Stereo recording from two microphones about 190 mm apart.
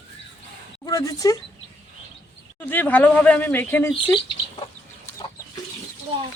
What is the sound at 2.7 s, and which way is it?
Speech, 10° left (ahead or behind).